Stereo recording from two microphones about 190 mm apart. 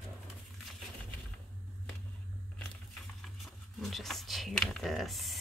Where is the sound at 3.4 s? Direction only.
Centre (ahead or behind).